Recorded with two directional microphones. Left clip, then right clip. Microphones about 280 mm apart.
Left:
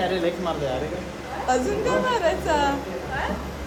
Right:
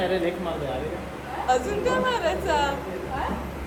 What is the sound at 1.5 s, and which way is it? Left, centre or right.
Speech, left.